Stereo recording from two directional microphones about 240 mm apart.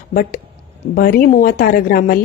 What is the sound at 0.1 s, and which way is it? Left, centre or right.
A woman's voice, left.